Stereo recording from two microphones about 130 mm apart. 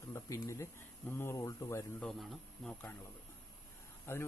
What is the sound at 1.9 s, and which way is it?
Speech, 5° left (ahead or behind).